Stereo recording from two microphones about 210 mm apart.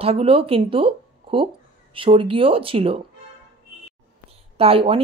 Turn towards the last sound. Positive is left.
turn(degrees=-25)  # may be behind; listen again after turning